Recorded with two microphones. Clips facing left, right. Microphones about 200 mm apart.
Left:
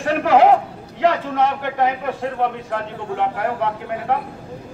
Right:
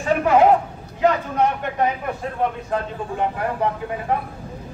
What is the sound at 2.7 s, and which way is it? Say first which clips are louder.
Speech: even; 75° left (ahead or behind).